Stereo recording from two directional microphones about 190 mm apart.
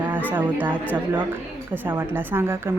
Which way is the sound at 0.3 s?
10° right (ahead or behind).